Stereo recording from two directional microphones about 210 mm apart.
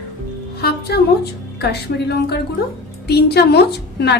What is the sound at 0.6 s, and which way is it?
A woman's voice, 50° left (ahead or behind).